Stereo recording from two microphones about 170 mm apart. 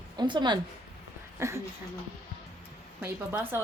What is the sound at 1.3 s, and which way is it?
Speech, 15° right (ahead or behind).